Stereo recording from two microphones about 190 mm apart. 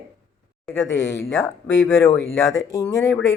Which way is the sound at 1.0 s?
15° left (ahead or behind).